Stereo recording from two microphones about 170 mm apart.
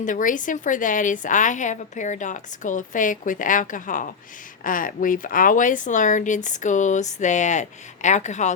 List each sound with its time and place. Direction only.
0.0 s a woman's voice: 50° left (ahead or behind)